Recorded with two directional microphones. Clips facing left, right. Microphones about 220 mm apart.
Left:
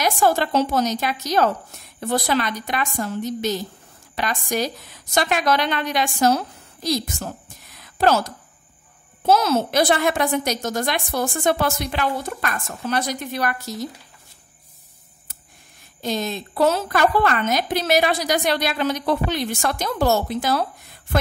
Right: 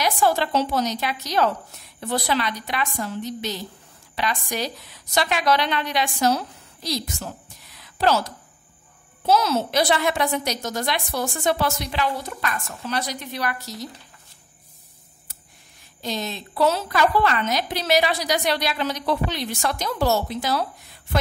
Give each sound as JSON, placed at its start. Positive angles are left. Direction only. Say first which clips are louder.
{"t": 0.0, "sound": "a woman's voice", "louder": "left 2 dB", "side_deg": 45}
{"t": 7.7, "sound": "a sound", "louder": "left 2 dB", "side_deg": 50}
{"t": 9.2, "sound": "a woman's voice", "louder": "left 2 dB", "side_deg": 50}
{"t": 16.0, "sound": "a woman's voice", "louder": "left 4 dB", "side_deg": 50}